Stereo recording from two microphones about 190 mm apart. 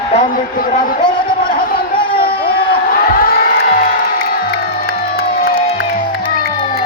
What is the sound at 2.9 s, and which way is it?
Music, 50° left (ahead or behind).